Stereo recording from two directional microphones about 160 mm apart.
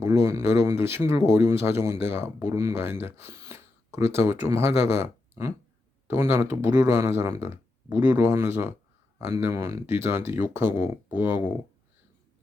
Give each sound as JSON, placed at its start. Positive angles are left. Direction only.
{"t": 0.0, "sound": "speech", "side_deg": -15}